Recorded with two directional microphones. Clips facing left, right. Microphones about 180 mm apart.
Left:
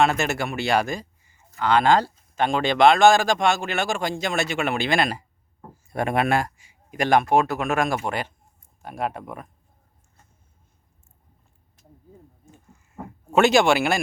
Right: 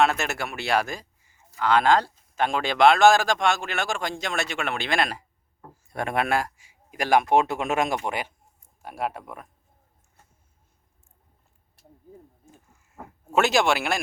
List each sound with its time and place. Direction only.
0.0 s speech: centre (ahead or behind)
7.3 s speech: 25° right (ahead or behind); by 9.5 s centre (ahead or behind)
12.5 s a sound: centre (ahead or behind)